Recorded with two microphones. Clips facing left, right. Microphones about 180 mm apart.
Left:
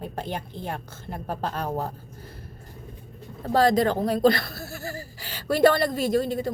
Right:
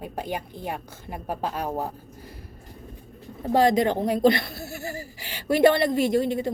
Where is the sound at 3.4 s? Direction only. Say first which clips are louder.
Even; 15° right (ahead or behind).